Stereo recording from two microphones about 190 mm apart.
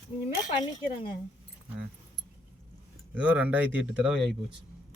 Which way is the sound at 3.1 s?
10° right (ahead or behind).